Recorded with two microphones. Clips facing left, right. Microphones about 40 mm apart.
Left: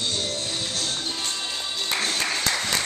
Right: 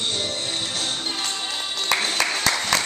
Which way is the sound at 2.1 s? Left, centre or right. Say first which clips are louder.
Right 3 dB; right.